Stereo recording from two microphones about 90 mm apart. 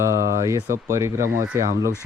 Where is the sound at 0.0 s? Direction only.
35° right (ahead or behind).